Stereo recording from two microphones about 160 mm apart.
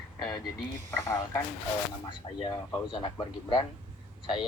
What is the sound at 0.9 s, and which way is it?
Speech, 15° left (ahead or behind).